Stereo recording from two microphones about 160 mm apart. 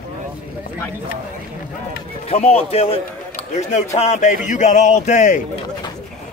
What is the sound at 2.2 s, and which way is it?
A man's voice, 40° left (ahead or behind).